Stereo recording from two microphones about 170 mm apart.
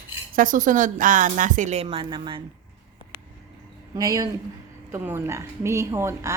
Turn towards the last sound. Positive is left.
turn(degrees=-15)  # may be behind; listen again after turning